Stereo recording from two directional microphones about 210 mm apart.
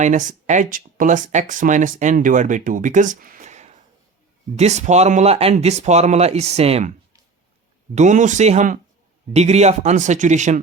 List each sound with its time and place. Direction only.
0.0 s speech: 35° right (ahead or behind)
7.9 s speech: 35° right (ahead or behind)